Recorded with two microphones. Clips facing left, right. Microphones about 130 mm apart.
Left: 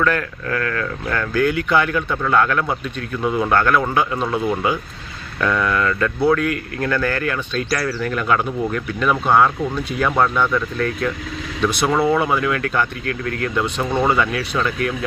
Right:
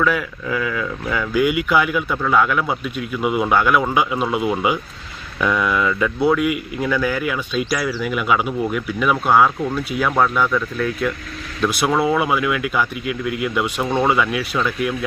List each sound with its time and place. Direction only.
0.0 s speech: 5° right (ahead or behind)